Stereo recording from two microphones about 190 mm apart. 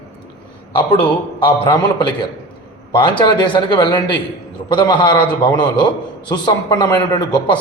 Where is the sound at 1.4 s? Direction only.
25° left (ahead or behind).